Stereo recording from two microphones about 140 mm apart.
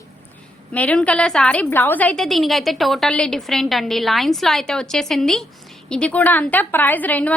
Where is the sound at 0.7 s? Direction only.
10° left (ahead or behind).